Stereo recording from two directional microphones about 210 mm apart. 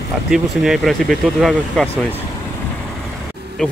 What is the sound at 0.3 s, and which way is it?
Speech, centre (ahead or behind).